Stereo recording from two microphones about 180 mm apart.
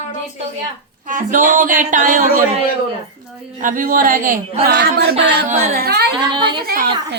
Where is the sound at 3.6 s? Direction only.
50° right (ahead or behind).